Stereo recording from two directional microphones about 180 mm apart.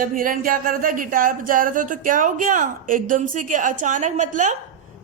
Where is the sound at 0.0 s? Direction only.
50° right (ahead or behind).